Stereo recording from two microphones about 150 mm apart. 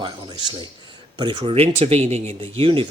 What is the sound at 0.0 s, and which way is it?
Speech, 30° right (ahead or behind).